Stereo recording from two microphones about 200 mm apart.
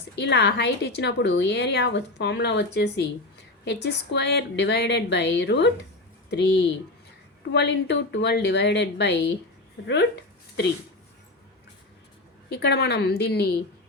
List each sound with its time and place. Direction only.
0.2 s a woman's voice: 60° left (ahead or behind)
12.5 s a woman's voice: 55° left (ahead or behind)